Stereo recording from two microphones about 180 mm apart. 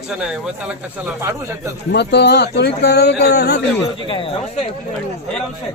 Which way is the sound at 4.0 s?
30° left (ahead or behind).